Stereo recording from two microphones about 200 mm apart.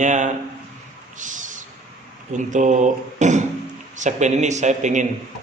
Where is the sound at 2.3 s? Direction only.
40° right (ahead or behind).